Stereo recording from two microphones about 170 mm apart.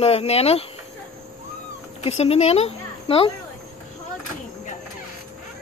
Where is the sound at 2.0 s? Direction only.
35° left (ahead or behind).